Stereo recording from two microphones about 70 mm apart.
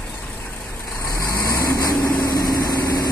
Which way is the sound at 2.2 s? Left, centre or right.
Left.